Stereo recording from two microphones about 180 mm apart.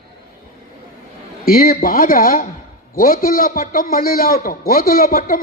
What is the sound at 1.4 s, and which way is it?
A man's voice, 55° left (ahead or behind).